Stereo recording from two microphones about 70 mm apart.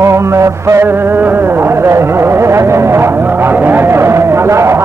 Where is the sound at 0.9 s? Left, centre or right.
Right.